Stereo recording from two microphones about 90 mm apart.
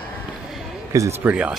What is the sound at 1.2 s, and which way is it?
Speech, 15° right (ahead or behind).